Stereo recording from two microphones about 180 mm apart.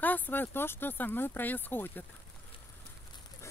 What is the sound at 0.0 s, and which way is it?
Speech, 10° left (ahead or behind).